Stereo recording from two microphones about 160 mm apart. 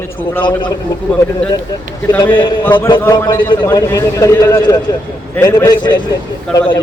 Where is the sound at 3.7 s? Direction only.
20° left (ahead or behind).